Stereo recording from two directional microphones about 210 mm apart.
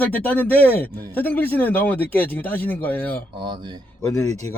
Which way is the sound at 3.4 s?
20° right (ahead or behind).